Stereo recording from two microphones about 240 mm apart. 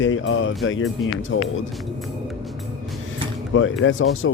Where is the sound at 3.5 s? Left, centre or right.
Left.